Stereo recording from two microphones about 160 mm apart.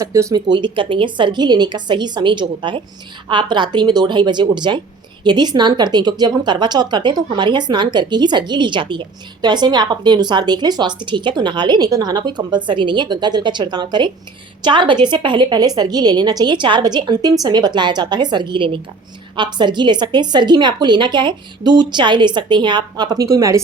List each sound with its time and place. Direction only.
0.0 s a woman's voice: 20° right (ahead or behind)